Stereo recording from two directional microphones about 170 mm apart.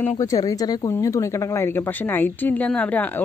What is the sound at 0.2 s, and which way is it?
Speech, 20° left (ahead or behind).